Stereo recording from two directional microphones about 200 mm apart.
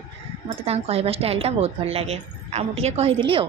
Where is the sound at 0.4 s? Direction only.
30° right (ahead or behind).